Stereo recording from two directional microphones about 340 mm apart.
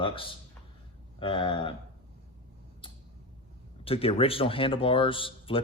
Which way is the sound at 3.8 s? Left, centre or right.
Centre.